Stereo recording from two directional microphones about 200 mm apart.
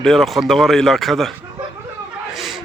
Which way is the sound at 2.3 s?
Centre (ahead or behind).